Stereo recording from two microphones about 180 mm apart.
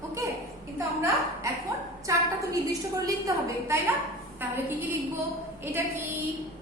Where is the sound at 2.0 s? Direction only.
20° right (ahead or behind).